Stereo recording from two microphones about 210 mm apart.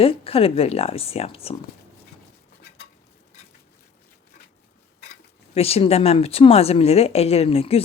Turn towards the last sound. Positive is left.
turn(degrees=30)  # may be behind; listen again after turning